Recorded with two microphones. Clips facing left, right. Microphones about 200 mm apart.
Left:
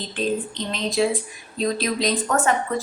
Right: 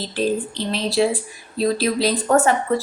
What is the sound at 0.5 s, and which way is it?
Speech, 35° right (ahead or behind).